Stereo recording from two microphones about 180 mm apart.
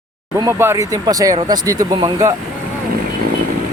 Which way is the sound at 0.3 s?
15° right (ahead or behind).